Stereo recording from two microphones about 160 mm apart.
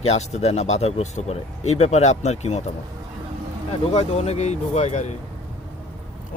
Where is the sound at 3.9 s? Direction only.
40° left (ahead or behind).